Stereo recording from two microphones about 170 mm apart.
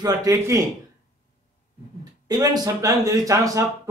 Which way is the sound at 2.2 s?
25° right (ahead or behind).